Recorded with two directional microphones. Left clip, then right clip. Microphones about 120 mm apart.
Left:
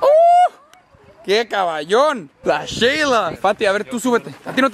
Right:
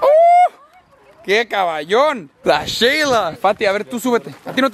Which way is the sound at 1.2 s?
Centre (ahead or behind).